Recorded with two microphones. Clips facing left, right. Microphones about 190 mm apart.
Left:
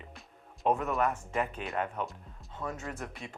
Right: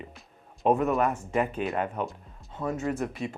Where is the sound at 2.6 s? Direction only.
30° right (ahead or behind).